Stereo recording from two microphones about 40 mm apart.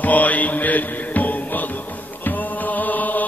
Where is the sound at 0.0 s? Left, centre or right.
Left.